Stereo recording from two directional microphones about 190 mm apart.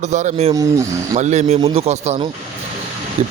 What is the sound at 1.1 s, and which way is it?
Speech, 40° right (ahead or behind).